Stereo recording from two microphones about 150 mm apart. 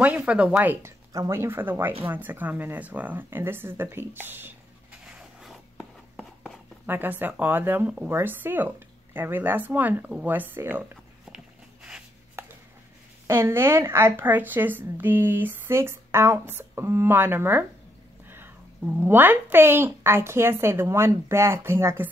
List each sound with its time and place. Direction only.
0.0 s speech: 10° right (ahead or behind)
5.0 s writing: 5° right (ahead or behind)
6.9 s speech: 15° right (ahead or behind)
11.3 s a sound: 5° right (ahead or behind)
12.4 s a sound: 15° right (ahead or behind)
13.3 s speech: 15° right (ahead or behind)